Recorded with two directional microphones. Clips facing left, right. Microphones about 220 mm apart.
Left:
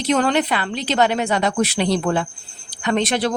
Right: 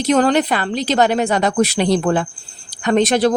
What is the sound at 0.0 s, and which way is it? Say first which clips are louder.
Speech: right 4 dB; 40° right (ahead or behind).